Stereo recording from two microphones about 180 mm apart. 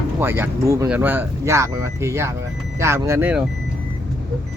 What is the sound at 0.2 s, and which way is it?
Speech, 10° right (ahead or behind).